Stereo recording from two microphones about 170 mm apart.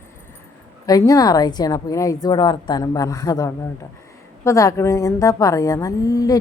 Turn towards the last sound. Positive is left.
turn(degrees=20)  # may be behind; listen again after turning